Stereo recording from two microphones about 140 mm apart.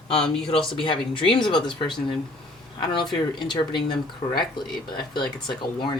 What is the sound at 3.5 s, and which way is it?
Speech, 30° left (ahead or behind).